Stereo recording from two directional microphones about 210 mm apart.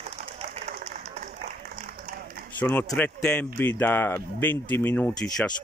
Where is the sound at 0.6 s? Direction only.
30° right (ahead or behind).